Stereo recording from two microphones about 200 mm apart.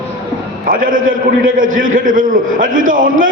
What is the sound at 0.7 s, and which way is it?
A man's voice, 45° right (ahead or behind).